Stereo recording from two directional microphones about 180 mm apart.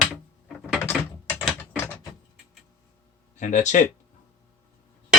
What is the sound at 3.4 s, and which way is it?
Speech, 40° left (ahead or behind).